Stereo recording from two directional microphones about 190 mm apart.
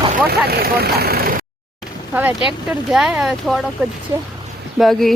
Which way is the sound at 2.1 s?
10° right (ahead or behind).